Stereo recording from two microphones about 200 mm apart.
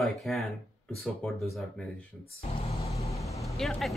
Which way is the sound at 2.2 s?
30° left (ahead or behind).